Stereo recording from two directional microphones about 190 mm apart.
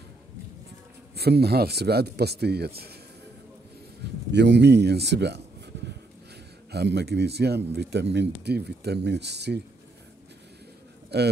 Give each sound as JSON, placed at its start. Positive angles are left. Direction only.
{"t": 1.1, "sound": "speech", "side_deg": -60}
{"t": 4.0, "sound": "speech", "side_deg": -60}
{"t": 6.7, "sound": "speech", "side_deg": -60}
{"t": 11.1, "sound": "a man's voice", "side_deg": -60}